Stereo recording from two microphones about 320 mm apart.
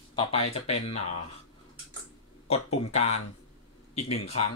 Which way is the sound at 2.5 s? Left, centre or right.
Centre.